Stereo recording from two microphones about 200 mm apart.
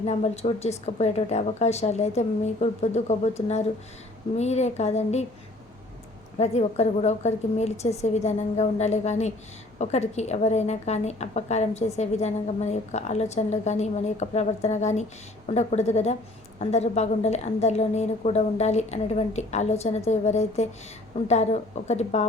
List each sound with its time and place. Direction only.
0.0 s a woman's voice: 35° left (ahead or behind)
6.4 s a woman's voice: 35° left (ahead or behind)